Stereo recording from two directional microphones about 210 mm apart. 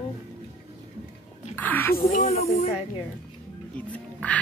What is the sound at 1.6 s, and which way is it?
Speech, 10° left (ahead or behind).